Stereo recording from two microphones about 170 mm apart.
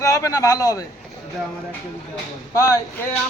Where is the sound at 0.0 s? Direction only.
20° left (ahead or behind).